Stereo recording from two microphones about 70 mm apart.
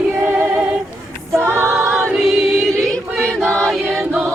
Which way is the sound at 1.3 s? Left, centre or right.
Right.